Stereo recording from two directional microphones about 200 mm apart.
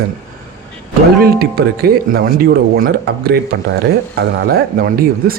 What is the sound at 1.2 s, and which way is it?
Speech, 50° right (ahead or behind).